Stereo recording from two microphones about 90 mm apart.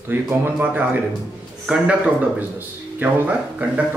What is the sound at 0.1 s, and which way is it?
Speech, 20° right (ahead or behind).